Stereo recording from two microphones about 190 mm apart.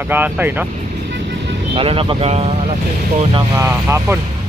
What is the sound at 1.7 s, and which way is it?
Speech, 30° right (ahead or behind).